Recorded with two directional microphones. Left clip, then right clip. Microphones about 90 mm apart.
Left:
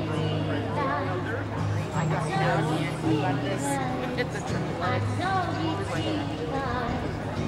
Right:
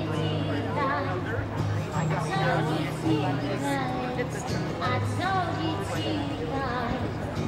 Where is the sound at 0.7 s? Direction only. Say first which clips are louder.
Right 1 dB; 25° right (ahead or behind).